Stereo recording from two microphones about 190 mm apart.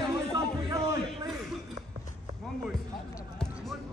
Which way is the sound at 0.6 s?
15° right (ahead or behind).